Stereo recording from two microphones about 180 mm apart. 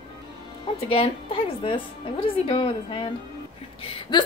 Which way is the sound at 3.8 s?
30° left (ahead or behind).